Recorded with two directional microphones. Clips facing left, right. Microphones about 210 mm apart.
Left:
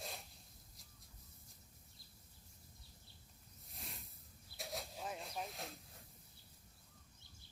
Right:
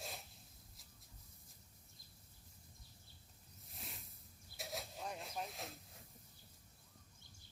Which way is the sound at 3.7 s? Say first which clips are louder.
Left 1 dB; centre (ahead or behind).